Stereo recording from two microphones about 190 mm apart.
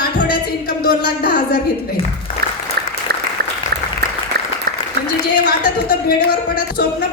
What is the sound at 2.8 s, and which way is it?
Applause, 60° right (ahead or behind).